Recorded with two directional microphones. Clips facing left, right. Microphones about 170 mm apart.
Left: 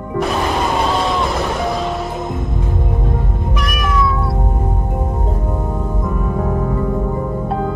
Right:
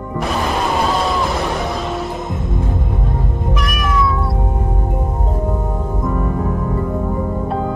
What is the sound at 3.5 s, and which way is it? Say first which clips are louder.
Cat: left 1 dB; centre (ahead or behind).